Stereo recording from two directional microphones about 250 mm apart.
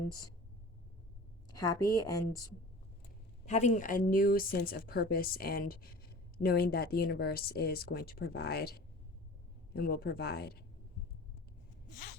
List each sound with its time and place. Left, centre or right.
1.5 s a woman's voice: centre
3.4 s a woman's voice: left
9.7 s a woman's voice: left